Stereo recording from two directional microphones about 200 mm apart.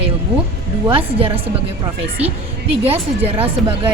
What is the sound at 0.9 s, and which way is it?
Speech, 25° right (ahead or behind).